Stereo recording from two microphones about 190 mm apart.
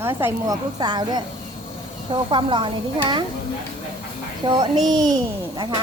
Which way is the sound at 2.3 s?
25° right (ahead or behind).